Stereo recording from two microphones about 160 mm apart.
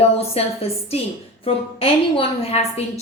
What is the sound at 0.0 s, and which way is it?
A woman's voice, 40° left (ahead or behind).